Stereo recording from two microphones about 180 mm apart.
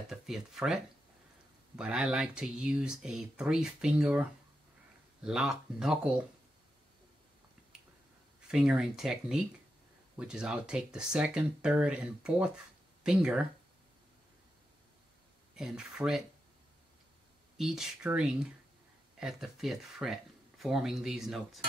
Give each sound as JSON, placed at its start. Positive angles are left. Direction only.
{"t": 0.1, "sound": "speech", "side_deg": 0}
{"t": 1.8, "sound": "speech", "side_deg": -5}
{"t": 8.4, "sound": "speech", "side_deg": -5}
{"t": 15.5, "sound": "speech", "side_deg": -5}
{"t": 17.6, "sound": "speech", "side_deg": 0}